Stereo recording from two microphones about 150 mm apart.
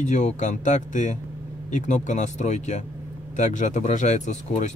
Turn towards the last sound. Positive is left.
turn(degrees=50)  # may be behind; listen again after turning